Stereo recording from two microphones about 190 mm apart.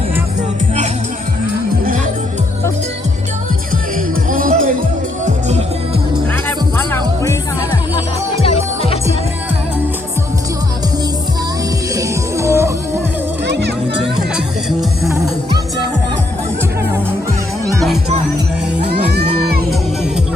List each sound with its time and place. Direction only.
4.3 s music: 45° right (ahead or behind)
6.9 s music: 15° left (ahead or behind)
8.4 s music: 30° left (ahead or behind)
11.9 s music: 15° right (ahead or behind)
13.5 s music: 65° right (ahead or behind)
14.0 s music: centre (ahead or behind)
17.7 s music: centre (ahead or behind)
18.9 s music: 55° right (ahead or behind)